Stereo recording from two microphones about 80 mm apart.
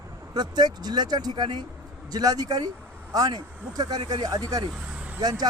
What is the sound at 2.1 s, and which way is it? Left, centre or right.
Speech, right.